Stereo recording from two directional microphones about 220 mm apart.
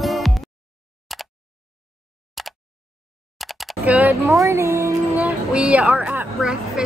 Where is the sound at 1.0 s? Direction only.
Centre (ahead or behind).